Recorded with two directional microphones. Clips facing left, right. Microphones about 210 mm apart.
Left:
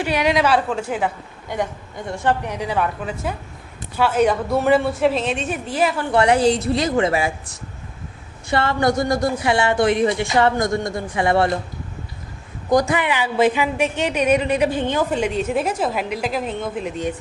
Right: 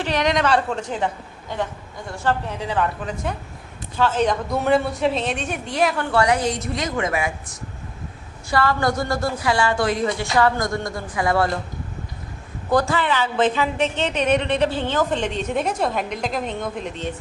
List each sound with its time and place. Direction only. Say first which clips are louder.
0.0 s a woman's voice: left 2 dB; 10° left (ahead or behind)
6.1 s a woman's voice: left 4 dB; 25° left (ahead or behind)
8.4 s a woman's voice: left 2 dB; 25° left (ahead or behind)
12.7 s a woman's voice: left 2 dB; 15° left (ahead or behind)